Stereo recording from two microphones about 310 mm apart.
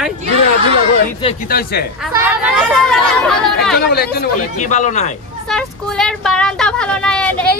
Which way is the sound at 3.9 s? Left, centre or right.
Left.